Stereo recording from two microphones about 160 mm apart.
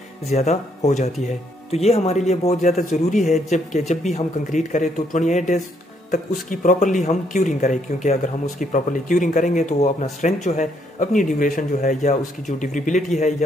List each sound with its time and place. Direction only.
0.3 s speech: 45° left (ahead or behind)